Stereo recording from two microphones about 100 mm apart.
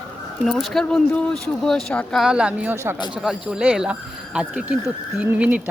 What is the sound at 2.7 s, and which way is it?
Speech, 25° right (ahead or behind).